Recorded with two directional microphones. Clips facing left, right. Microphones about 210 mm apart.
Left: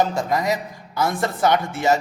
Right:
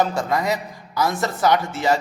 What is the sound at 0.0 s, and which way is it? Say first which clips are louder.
A man's voice: even; 20° left (ahead or behind).